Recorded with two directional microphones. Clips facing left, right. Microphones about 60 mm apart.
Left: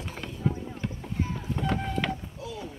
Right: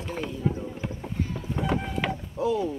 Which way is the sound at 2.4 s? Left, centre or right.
Right.